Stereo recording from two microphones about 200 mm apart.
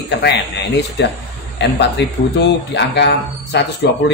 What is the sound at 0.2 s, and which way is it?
Speech, 60° left (ahead or behind).